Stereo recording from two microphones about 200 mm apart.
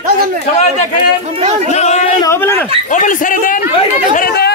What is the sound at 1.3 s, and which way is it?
Speech, 30° right (ahead or behind).